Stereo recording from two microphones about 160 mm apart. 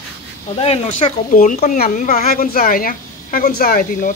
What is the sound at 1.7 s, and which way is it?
A woman's voice, 60° left (ahead or behind).